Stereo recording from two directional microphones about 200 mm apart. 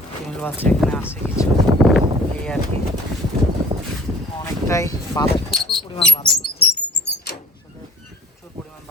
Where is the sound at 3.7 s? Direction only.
25° right (ahead or behind).